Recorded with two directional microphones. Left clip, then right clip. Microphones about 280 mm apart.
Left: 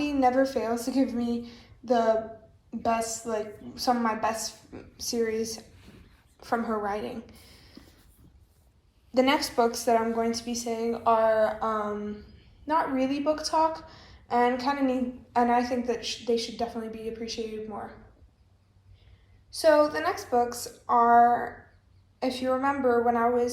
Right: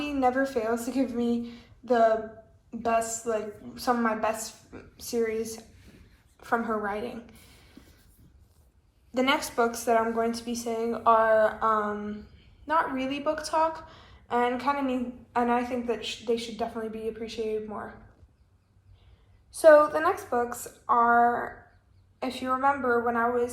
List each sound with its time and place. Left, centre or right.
0.0 s a woman's voice: centre
7.8 s a sound: centre
9.1 s a woman's voice: centre
19.5 s a woman's voice: centre